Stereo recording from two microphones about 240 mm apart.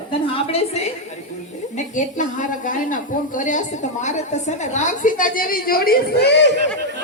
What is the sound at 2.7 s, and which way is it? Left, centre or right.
A woman's voice, left.